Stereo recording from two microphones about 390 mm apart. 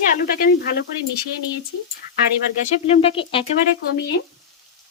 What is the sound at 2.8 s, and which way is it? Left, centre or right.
Speech, centre.